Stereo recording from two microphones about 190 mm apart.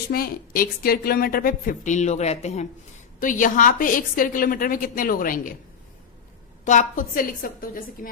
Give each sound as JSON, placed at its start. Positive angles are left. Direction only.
{"t": 0.1, "sound": "a woman's voice", "side_deg": 50}
{"t": 6.7, "sound": "a woman's voice", "side_deg": 45}